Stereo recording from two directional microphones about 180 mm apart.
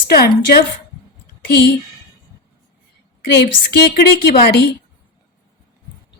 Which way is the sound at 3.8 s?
65° left (ahead or behind).